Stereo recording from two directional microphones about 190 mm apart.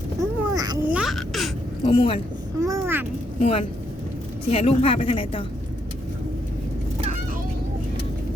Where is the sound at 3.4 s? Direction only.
30° left (ahead or behind).